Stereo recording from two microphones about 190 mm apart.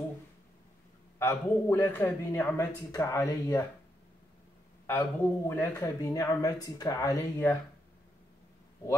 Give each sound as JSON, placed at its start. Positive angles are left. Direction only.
{"t": 1.2, "sound": "speech", "side_deg": 10}
{"t": 4.8, "sound": "speech", "side_deg": 10}